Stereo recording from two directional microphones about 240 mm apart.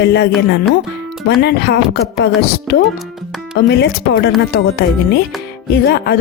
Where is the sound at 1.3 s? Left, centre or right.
Left.